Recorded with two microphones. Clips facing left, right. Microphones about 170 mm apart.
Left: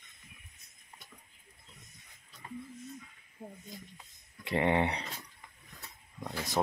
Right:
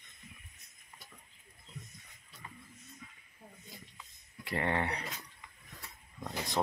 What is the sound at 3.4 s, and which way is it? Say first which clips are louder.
Snake: left 9 dB; 50° left (ahead or behind).